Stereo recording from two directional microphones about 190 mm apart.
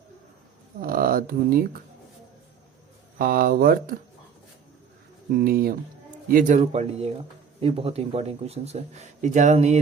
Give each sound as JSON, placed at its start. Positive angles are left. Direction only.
{"t": 0.8, "sound": "speech", "side_deg": -50}
{"t": 3.2, "sound": "speech", "side_deg": -50}
{"t": 5.3, "sound": "speech", "side_deg": -50}